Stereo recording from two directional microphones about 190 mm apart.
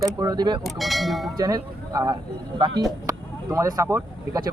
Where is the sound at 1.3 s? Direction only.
20° right (ahead or behind).